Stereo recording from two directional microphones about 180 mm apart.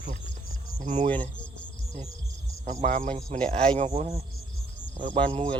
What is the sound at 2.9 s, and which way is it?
Speech, 50° right (ahead or behind).